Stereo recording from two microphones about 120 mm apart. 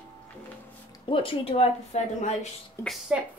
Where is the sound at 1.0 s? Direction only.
45° left (ahead or behind).